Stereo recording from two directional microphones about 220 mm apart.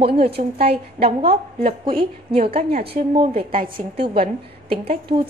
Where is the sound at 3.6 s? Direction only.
40° right (ahead or behind).